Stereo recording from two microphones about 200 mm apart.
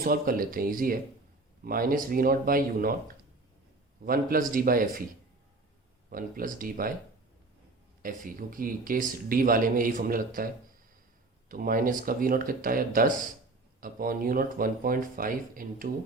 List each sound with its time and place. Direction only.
0.0 s speech: 45° right (ahead or behind)
4.0 s speech: 45° right (ahead or behind)
6.1 s speech: 45° right (ahead or behind)
8.0 s speech: 45° right (ahead or behind)